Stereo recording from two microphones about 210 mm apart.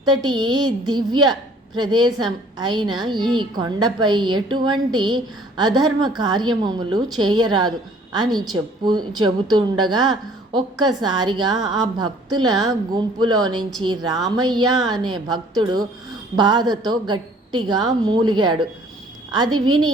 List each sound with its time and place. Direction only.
0.0 s a woman's voice: 20° right (ahead or behind)
14.7 s a woman's voice: centre (ahead or behind)
14.9 s a woman's voice: 20° right (ahead or behind)